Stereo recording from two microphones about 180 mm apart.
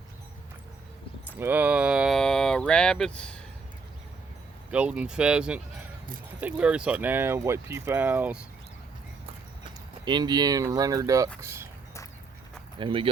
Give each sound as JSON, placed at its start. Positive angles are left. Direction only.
{"t": 1.4, "sound": "speech", "side_deg": -10}
{"t": 4.7, "sound": "speech", "side_deg": -5}
{"t": 10.1, "sound": "speech", "side_deg": -25}
{"t": 12.8, "sound": "speech", "side_deg": -30}